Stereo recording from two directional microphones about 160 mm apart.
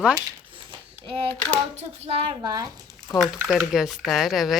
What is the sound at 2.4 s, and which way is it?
Speech, 25° right (ahead or behind).